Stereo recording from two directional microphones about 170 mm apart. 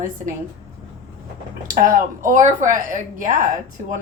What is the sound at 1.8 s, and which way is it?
A woman's voice, 50° right (ahead or behind).